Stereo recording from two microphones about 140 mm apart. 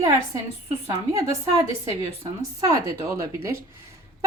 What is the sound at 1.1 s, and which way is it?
Speech, 20° right (ahead or behind).